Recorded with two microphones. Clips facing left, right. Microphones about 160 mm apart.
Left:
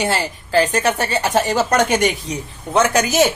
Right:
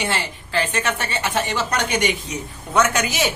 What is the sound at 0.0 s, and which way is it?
A woman's voice, 40° left (ahead or behind).